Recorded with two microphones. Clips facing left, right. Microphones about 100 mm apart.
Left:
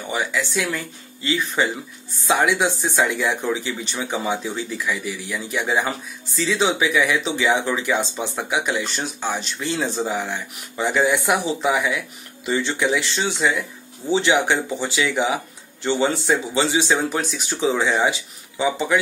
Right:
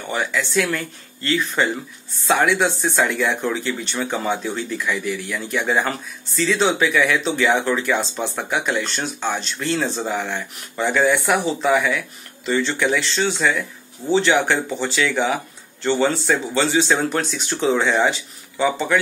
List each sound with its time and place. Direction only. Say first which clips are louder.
0.0 s speech: right 1 dB; 10° left (ahead or behind)